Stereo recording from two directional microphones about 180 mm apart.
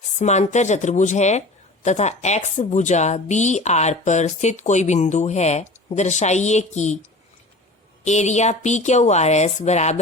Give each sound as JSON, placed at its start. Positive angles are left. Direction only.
{"t": 0.2, "sound": "speech", "side_deg": 40}
{"t": 8.0, "sound": "speech", "side_deg": 40}